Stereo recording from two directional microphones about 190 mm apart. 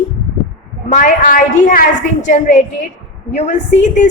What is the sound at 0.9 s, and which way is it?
A woman's voice, 45° left (ahead or behind).